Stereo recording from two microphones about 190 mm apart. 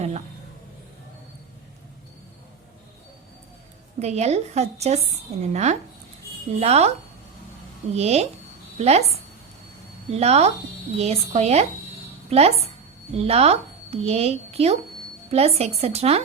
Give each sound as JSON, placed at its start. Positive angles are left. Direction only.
{"t": 4.0, "sound": "speech", "side_deg": -35}
{"t": 7.9, "sound": "speech", "side_deg": -35}